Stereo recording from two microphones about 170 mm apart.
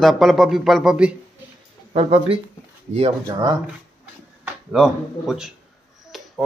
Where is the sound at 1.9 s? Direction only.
35° right (ahead or behind).